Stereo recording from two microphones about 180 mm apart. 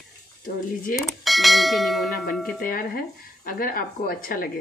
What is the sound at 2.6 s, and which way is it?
Speech, 50° left (ahead or behind).